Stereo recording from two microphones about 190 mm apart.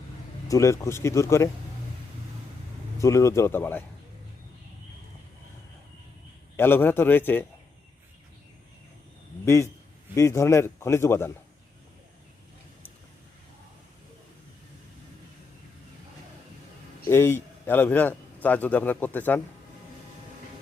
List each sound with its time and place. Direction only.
0.4 s speech: 15° left (ahead or behind)
3.0 s speech: 15° left (ahead or behind)
6.6 s speech: 10° left (ahead or behind)
10.2 s speech: 15° left (ahead or behind)
17.1 s a man's voice: 15° left (ahead or behind)